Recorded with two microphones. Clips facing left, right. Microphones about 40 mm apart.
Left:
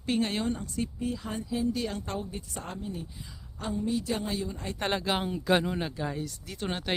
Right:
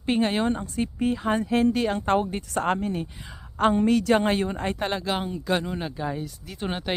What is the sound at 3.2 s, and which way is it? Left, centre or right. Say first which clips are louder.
Speech: right 16 dB; right.